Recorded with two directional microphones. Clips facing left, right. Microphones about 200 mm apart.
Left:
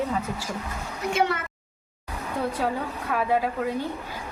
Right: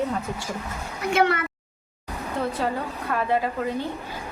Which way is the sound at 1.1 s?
65° right (ahead or behind).